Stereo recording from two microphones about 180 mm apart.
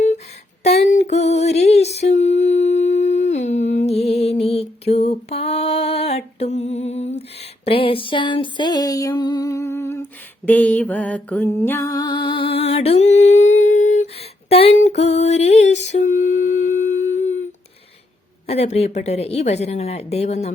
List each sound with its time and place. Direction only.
0.6 s female singing: 35° left (ahead or behind)
2.0 s humming: 40° left (ahead or behind)
18.4 s speech: 35° left (ahead or behind)